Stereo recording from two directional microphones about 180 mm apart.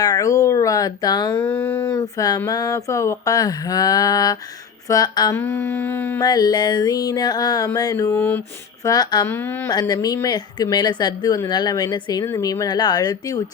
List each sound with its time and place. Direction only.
0.0 s speech: 20° left (ahead or behind)
1.4 s a sound: 5° left (ahead or behind)
1.9 s a woman's voice: 20° left (ahead or behind)